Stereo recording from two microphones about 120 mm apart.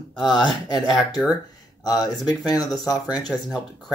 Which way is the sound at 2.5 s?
30° left (ahead or behind).